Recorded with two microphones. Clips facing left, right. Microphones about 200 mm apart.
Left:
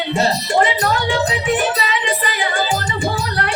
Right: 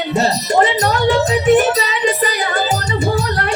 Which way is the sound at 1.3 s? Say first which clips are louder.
Right 8 dB; 40° right (ahead or behind).